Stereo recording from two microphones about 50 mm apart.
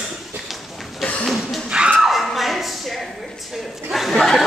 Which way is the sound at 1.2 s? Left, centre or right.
Centre.